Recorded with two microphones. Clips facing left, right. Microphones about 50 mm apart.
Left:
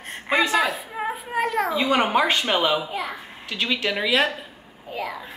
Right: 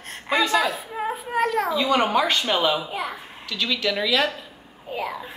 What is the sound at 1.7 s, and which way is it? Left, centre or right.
Speech, left.